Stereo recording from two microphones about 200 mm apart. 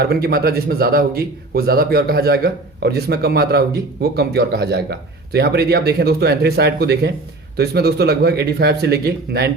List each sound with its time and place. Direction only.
0.0 s a man's voice: 50° right (ahead or behind)